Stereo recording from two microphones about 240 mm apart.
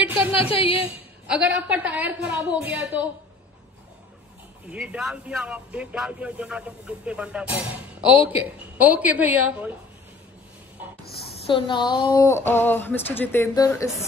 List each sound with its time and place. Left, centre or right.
0.3 s a woman's voice: left
1.3 s a woman's voice: centre
4.6 s a woman's voice: centre
11.4 s speech: centre